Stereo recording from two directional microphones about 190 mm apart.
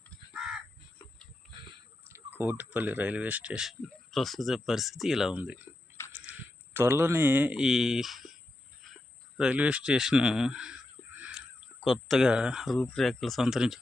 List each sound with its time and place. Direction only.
0.3 s crow: centre (ahead or behind)
2.0 s speech: 10° right (ahead or behind)
9.4 s speech: 5° right (ahead or behind)
11.2 s crow: 5° right (ahead or behind)
12.8 s speech: 5° left (ahead or behind)